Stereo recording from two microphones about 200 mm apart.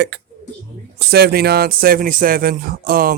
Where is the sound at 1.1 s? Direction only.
50° right (ahead or behind).